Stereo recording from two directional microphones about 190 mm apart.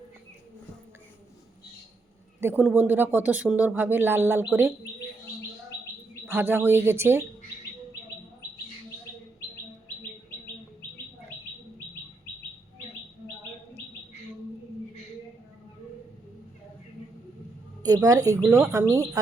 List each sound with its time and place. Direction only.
2.4 s speech: 10° right (ahead or behind)
6.2 s speech: 10° right (ahead or behind)
17.8 s a woman's voice: 20° right (ahead or behind)